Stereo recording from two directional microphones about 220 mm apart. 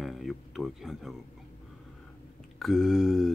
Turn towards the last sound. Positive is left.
turn(degrees=0)  # may be behind; listen again after turning